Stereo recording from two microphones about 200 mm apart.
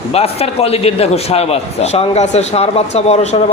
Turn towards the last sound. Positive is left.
turn(degrees=35)  # may be behind; listen again after turning